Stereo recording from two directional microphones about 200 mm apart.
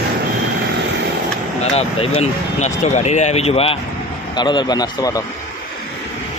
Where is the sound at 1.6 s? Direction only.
30° left (ahead or behind).